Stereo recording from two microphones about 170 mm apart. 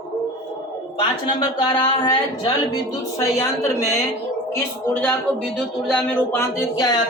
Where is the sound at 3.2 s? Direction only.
15° left (ahead or behind).